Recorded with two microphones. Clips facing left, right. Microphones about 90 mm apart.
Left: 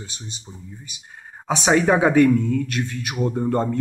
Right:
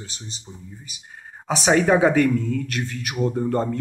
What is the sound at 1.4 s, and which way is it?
Speech, 20° left (ahead or behind).